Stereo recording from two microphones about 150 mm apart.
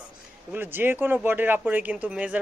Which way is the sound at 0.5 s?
15° right (ahead or behind).